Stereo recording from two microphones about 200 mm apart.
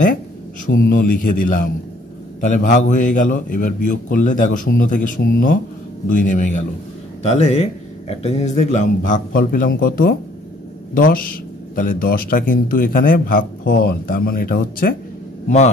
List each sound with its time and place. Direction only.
0.7 s a man's voice: 45° left (ahead or behind)